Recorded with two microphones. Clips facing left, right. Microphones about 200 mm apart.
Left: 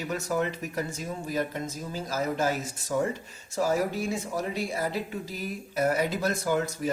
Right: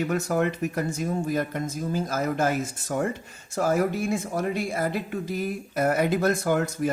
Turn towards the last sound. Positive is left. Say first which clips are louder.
# right 3 dB
turn(degrees=-55)  # may be behind; listen again after turning